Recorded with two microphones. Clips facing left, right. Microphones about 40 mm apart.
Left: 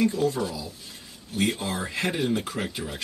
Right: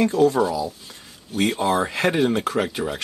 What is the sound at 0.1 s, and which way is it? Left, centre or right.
Speech, right.